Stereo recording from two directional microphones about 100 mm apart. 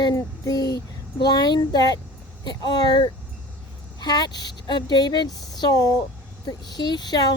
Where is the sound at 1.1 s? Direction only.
45° left (ahead or behind).